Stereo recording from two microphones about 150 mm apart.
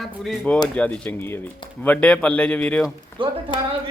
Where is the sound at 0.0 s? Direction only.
Centre (ahead or behind).